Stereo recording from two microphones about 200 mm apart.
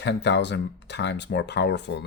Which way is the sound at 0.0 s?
60° left (ahead or behind).